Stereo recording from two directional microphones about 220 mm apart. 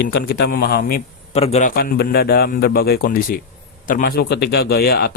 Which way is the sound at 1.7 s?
45° left (ahead or behind).